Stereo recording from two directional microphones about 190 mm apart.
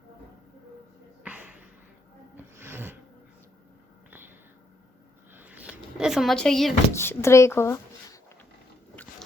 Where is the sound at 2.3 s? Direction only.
10° right (ahead or behind).